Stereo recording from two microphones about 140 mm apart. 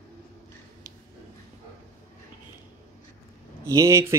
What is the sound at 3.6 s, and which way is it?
Speech, 20° right (ahead or behind).